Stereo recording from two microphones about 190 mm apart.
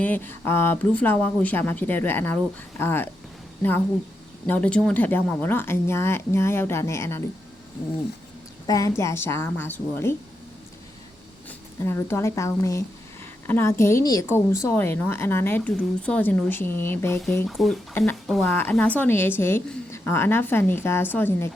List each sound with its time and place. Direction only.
0.0 s a woman's voice: 10° left (ahead or behind)
4.4 s a woman's voice: 10° left (ahead or behind)
8.6 s a woman's voice: 20° left (ahead or behind)
11.4 s a woman's voice: 10° left (ahead or behind)